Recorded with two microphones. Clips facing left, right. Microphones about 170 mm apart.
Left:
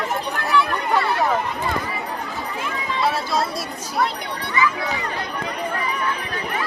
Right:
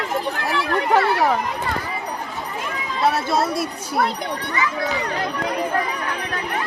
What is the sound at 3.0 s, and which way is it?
Speech, 50° right (ahead or behind).